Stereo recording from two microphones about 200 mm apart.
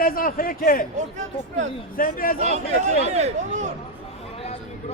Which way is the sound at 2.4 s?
35° right (ahead or behind).